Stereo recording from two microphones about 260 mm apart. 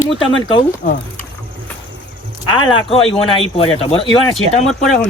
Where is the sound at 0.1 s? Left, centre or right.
Centre.